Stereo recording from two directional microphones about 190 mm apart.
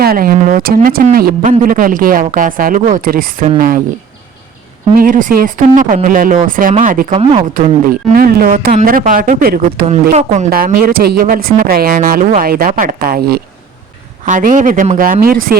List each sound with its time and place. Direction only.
0.0 s speech: 50° right (ahead or behind)
4.9 s speech: 45° right (ahead or behind)
7.2 s speech: 30° right (ahead or behind)
8.1 s speech: 50° right (ahead or behind)
9.8 s speech: 35° right (ahead or behind)